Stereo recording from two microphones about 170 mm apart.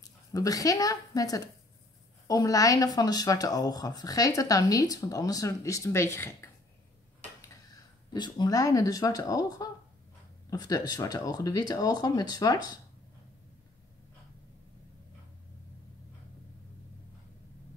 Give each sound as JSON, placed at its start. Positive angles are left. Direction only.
{"t": 0.3, "sound": "speech", "side_deg": 20}
{"t": 8.1, "sound": "speech", "side_deg": 25}